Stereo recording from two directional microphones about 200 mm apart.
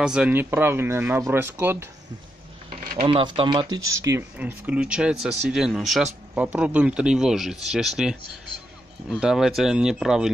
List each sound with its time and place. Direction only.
0.0 s speech: 5° right (ahead or behind)
3.0 s speech: 25° right (ahead or behind); by 10.3 s centre (ahead or behind)